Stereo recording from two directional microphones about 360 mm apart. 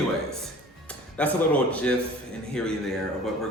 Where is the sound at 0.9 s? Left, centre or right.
Centre.